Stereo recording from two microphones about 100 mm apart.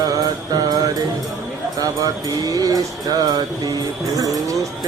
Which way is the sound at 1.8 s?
40° right (ahead or behind).